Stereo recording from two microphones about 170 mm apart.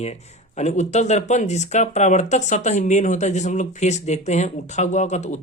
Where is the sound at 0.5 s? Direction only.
40° left (ahead or behind).